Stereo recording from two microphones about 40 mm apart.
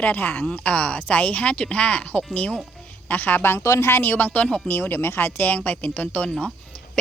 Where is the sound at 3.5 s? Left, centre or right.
Left.